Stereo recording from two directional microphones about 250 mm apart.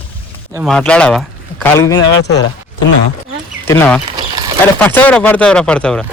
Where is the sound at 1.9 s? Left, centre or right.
Left.